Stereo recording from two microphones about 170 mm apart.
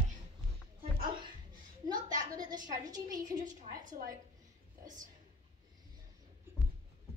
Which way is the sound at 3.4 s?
50° right (ahead or behind).